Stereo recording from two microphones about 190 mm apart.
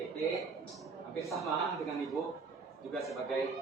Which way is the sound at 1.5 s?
Centre (ahead or behind).